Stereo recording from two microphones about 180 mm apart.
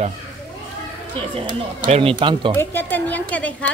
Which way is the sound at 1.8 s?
35° right (ahead or behind).